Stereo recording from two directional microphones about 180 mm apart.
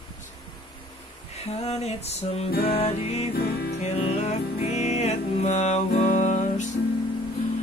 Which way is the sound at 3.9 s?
35° left (ahead or behind).